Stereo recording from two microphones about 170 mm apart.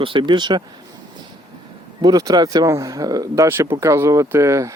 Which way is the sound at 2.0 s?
20° right (ahead or behind).